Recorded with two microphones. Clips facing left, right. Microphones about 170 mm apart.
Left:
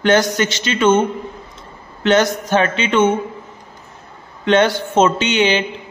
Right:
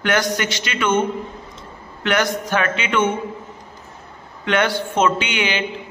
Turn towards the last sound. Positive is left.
turn(degrees=25)  # may be behind; listen again after turning